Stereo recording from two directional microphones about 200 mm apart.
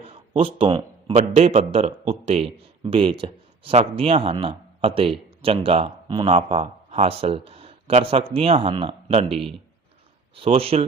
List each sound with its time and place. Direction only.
0.0 s a man's voice: 30° right (ahead or behind)